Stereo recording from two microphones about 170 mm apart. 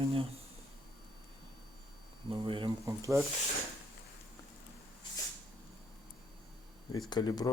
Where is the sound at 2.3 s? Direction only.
30° right (ahead or behind).